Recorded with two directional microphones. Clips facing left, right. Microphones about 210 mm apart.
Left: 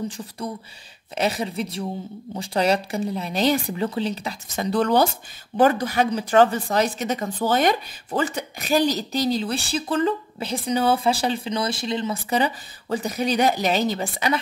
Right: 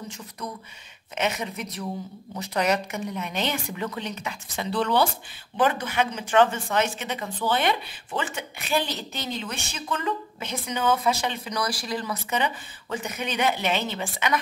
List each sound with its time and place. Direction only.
1.1 s speech: 35° left (ahead or behind)